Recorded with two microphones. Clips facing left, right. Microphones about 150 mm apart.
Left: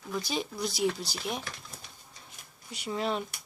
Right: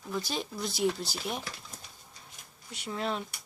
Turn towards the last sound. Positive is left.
turn(degrees=0)  # may be behind; listen again after turning